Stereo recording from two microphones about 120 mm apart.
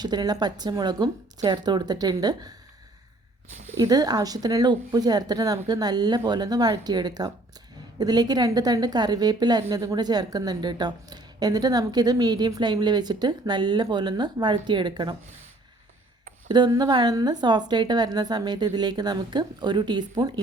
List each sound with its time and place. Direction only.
0.0 s a woman's voice: 35° right (ahead or behind)
3.8 s a woman's voice: 30° right (ahead or behind)
16.5 s a woman's voice: 40° right (ahead or behind)